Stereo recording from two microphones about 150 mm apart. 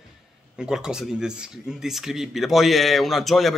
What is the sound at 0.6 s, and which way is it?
Speech, 5° right (ahead or behind).